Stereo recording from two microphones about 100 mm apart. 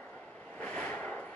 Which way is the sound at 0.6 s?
15° left (ahead or behind).